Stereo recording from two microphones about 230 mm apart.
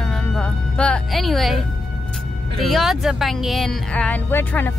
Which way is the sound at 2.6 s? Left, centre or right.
Centre.